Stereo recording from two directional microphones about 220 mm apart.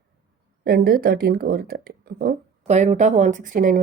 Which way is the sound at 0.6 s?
45° right (ahead or behind).